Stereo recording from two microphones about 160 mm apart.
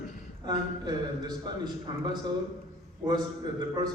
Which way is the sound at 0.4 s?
25° right (ahead or behind).